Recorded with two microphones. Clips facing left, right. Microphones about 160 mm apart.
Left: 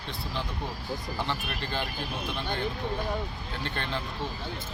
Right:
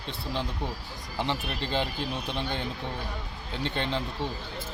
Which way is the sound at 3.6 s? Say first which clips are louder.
Right 4 dB; 20° right (ahead or behind).